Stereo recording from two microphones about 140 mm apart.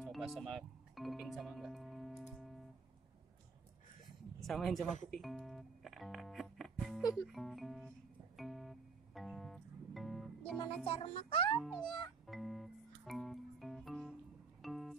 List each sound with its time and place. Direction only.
0.0 s music: centre (ahead or behind)
4.0 s a sound: centre (ahead or behind)
5.1 s speech: centre (ahead or behind)
8.4 s music: centre (ahead or behind)
10.9 s a child's voice: 45° left (ahead or behind)
11.6 s speech: centre (ahead or behind)
12.3 s music: centre (ahead or behind)